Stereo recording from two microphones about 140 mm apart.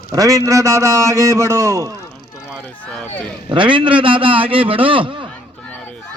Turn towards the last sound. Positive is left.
turn(degrees=-35)  # may be behind; listen again after turning